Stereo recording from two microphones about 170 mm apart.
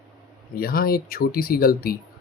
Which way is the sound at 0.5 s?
60° left (ahead or behind).